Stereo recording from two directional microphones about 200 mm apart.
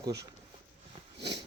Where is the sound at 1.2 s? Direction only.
25° right (ahead or behind).